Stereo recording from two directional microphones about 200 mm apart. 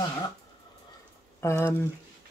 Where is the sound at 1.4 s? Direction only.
10° left (ahead or behind).